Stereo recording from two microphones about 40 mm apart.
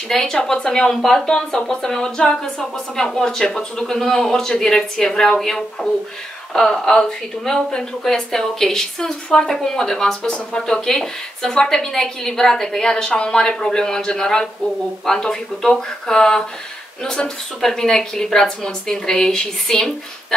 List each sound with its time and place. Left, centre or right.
0.1 s a woman's voice: centre
10.2 s speech: left
10.9 s a woman's voice: centre